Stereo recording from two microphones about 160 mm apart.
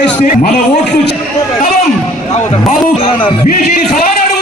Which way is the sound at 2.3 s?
40° left (ahead or behind).